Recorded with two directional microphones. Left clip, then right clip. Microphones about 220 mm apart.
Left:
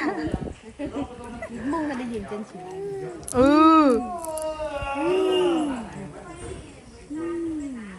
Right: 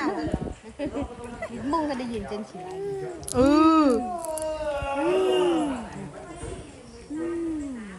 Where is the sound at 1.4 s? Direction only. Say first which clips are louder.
Right 1 dB; 5° right (ahead or behind).